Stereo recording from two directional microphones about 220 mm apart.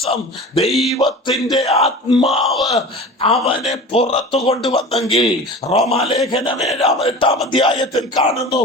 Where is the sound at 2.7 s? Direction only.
25° left (ahead or behind).